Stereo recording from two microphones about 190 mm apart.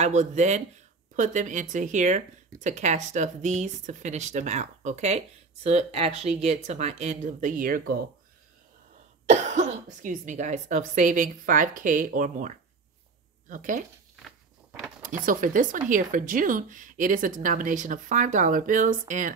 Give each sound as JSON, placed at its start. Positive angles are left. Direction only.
{"t": 0.0, "sound": "speech", "side_deg": -40}
{"t": 9.2, "sound": "speech", "side_deg": -40}
{"t": 15.0, "sound": "speech", "side_deg": -45}